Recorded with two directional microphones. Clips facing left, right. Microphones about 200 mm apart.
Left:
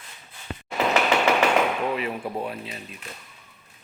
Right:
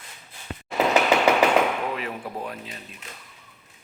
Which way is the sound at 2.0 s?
10° left (ahead or behind).